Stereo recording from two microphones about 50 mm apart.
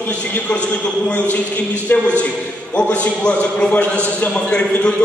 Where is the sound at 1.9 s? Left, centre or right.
Left.